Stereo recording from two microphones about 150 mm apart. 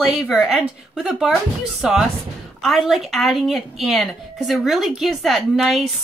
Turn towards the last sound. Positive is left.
turn(degrees=0)  # may be behind; listen again after turning